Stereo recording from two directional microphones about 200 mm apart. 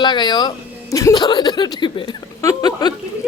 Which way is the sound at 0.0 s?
20° left (ahead or behind).